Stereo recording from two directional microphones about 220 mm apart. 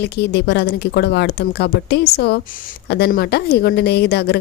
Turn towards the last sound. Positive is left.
turn(degrees=50)  # may be behind; listen again after turning